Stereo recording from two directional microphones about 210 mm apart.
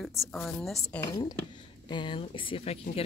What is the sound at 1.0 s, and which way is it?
Speech, 20° left (ahead or behind).